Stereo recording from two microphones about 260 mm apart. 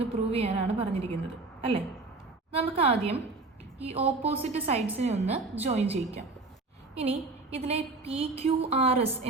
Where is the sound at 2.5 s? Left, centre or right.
Right.